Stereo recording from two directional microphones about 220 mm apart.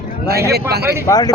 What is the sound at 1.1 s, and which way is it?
Speech, 15° left (ahead or behind).